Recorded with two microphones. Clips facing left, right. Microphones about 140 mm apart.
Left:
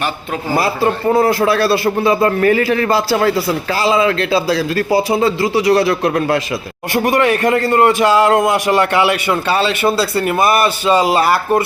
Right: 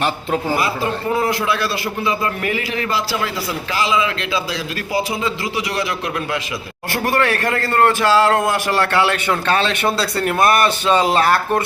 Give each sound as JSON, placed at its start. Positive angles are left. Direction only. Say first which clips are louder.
{"t": 0.5, "sound": "a man's voice", "louder": "left 5 dB", "side_deg": 35}
{"t": 6.9, "sound": "a man's voice", "louder": "left 5 dB", "side_deg": 15}